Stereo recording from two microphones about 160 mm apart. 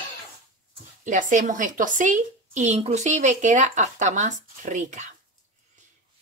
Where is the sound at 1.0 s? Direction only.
50° right (ahead or behind).